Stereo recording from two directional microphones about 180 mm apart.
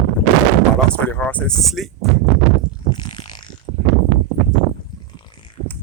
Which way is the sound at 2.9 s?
25° left (ahead or behind).